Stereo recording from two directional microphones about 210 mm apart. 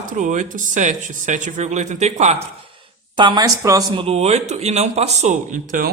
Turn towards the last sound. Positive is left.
turn(degrees=-40)  # may be behind; listen again after turning